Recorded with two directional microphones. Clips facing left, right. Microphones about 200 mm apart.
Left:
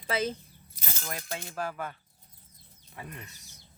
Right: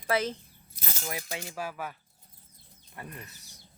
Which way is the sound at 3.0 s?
Centre (ahead or behind).